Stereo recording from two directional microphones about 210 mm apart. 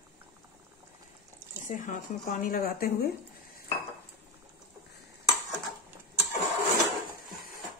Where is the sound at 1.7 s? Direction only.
35° left (ahead or behind).